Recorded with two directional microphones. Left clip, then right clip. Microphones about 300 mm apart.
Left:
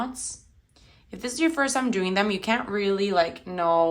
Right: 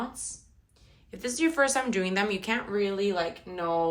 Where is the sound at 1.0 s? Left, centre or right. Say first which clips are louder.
Left 3 dB; centre.